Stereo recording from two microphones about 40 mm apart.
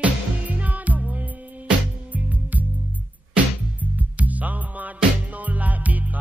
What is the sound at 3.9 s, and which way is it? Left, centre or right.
Music, right.